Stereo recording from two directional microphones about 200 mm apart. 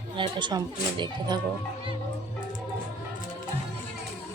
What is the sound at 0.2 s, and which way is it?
Speech, 25° right (ahead or behind).